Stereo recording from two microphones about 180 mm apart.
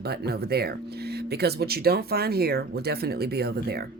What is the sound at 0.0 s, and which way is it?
Speech, 65° right (ahead or behind).